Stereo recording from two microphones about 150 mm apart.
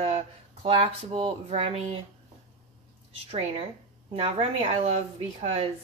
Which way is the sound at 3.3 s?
40° right (ahead or behind).